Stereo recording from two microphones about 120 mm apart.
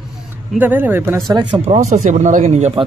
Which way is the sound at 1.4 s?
35° right (ahead or behind).